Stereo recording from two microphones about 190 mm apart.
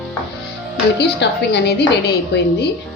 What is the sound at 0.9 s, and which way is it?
Speech, 65° left (ahead or behind).